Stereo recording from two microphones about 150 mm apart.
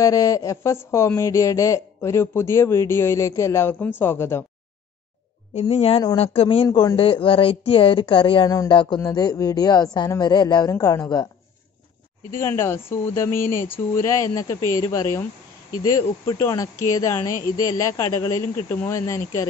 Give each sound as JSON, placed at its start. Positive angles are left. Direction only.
{"t": 0.0, "sound": "a man's voice", "side_deg": 20}
{"t": 5.5, "sound": "a woman's voice", "side_deg": 45}
{"t": 12.3, "sound": "a man's voice", "side_deg": 15}